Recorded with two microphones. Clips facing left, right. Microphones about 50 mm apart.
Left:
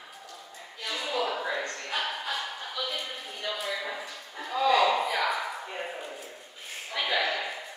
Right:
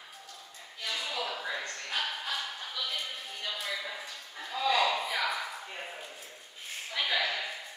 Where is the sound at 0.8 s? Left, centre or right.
Centre.